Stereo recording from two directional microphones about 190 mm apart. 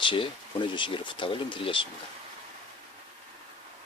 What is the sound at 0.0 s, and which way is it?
Speech, 25° left (ahead or behind).